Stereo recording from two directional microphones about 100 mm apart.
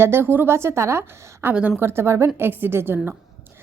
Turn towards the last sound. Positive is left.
turn(degrees=-25)  # may be behind; listen again after turning